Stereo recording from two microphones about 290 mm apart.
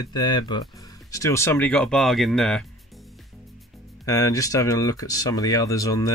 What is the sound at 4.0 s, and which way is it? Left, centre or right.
Speech, centre.